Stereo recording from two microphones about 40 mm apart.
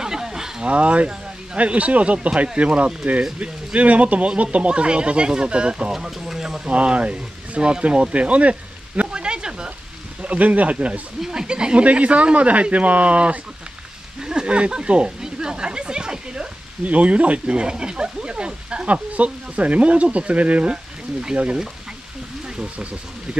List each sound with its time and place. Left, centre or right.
0.0 s a sound: centre
0.7 s speech: right
5.9 s speech: centre
6.7 s speech: right
9.1 s a sound: right
10.2 s speech: right
11.1 s speech: centre; by 13.4 s right
14.2 s a sound: right
16.8 s speech: right